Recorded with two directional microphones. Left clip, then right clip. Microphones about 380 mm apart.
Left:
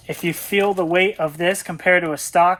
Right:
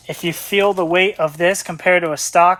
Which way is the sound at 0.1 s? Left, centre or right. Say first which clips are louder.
Right 2 dB; centre.